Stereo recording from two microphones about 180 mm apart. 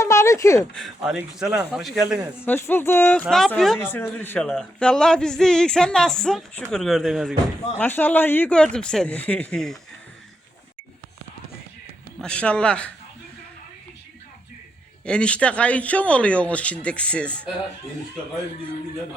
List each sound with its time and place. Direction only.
0.0 s a sound: 15° left (ahead or behind)
0.7 s speech: centre (ahead or behind)
2.4 s speech: 10° left (ahead or behind)
3.8 s speech: 10° left (ahead or behind)
7.8 s speech: 10° left (ahead or behind)
12.2 s speech: 5° left (ahead or behind)
15.0 s speech: 5° left (ahead or behind)